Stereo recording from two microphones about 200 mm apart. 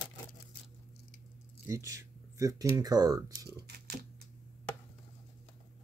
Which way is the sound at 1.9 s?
15° right (ahead or behind).